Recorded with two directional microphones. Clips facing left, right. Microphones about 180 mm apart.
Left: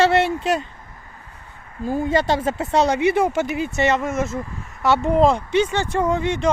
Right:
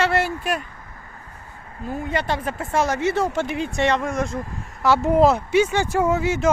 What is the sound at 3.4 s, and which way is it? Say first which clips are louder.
Speech: left 1 dB; 5° left (ahead or behind).